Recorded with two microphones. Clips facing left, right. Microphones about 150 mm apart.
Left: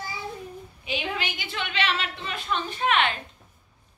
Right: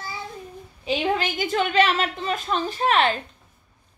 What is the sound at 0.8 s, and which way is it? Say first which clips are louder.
A woman's voice: right 8 dB; 45° right (ahead or behind).